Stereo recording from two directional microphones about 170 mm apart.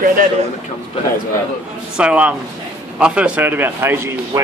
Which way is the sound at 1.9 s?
5° right (ahead or behind).